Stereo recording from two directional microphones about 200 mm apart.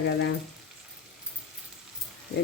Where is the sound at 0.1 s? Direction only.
60° left (ahead or behind).